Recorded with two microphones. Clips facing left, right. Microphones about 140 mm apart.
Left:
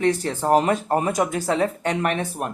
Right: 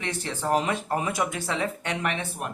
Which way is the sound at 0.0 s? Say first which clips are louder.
Left 9 dB; 40° left (ahead or behind).